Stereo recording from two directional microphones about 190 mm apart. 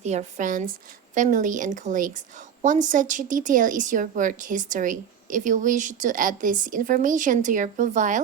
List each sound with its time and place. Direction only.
0.0 s a woman's voice: 35° right (ahead or behind)